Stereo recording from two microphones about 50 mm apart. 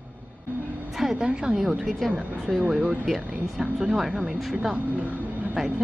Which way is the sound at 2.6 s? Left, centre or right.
Right.